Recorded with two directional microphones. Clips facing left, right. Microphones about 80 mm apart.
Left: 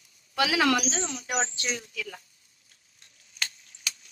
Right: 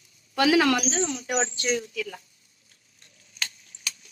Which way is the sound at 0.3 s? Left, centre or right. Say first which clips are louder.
Right 4 dB; right.